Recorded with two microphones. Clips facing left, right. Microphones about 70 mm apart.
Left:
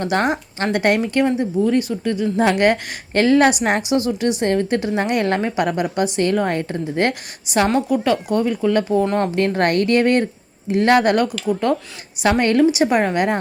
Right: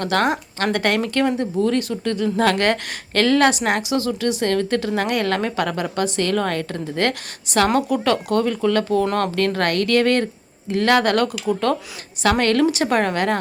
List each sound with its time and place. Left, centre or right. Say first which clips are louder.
0.0 s a woman's voice: even; left